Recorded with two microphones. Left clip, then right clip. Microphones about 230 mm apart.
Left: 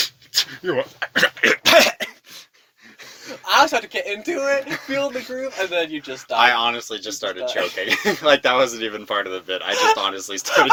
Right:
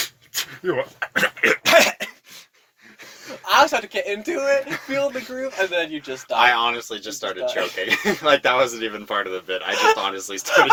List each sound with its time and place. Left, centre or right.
0.3 s throat clearing: left
3.2 s speech: left
6.3 s speech: left
9.7 s speech: centre
10.0 s speech: left